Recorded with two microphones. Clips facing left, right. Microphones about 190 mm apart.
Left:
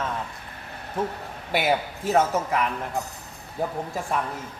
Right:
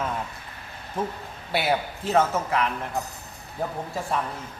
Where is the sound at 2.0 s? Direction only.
10° left (ahead or behind).